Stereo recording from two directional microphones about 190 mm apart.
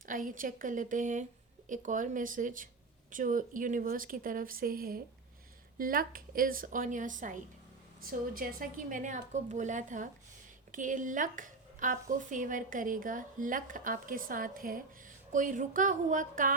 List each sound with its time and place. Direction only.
0.0 s speech: 45° right (ahead or behind)